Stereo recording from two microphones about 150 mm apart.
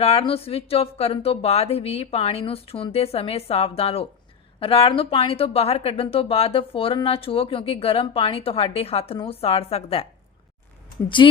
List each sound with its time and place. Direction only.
0.0 s speech: 40° left (ahead or behind)
11.2 s speech: 30° left (ahead or behind)